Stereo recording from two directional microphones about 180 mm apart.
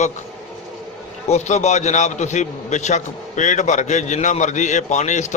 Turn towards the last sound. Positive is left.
turn(degrees=40)  # may be behind; listen again after turning